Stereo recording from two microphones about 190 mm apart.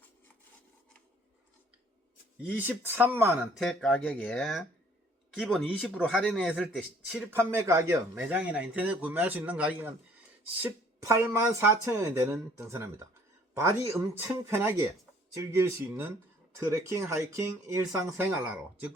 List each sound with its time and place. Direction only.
2.6 s speech: 10° right (ahead or behind)
3.6 s speech: 5° left (ahead or behind)